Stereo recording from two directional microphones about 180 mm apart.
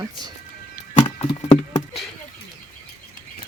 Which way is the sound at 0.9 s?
45° left (ahead or behind).